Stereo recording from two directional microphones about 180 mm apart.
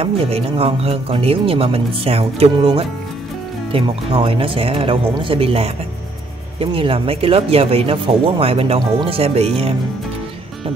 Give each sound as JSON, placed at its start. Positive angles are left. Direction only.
{"t": 0.0, "sound": "speech", "side_deg": -35}